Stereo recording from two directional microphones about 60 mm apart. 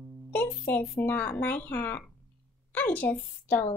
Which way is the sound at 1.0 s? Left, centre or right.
Left.